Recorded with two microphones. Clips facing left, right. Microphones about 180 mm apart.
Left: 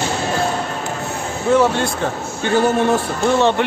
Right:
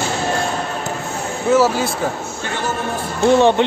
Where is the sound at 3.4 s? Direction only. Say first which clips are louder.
Right 1 dB; 15° right (ahead or behind).